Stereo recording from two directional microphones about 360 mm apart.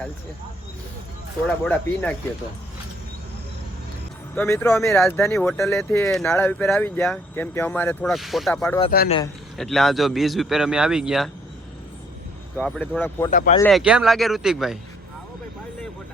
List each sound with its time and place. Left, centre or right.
1.5 s speech: centre
4.4 s speech: centre
8.8 s speech: left
9.6 s speech: centre
12.5 s speech: centre
13.3 s speech: left
13.6 s speech: centre